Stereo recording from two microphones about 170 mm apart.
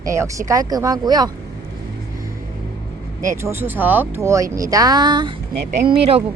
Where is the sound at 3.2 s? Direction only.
15° right (ahead or behind).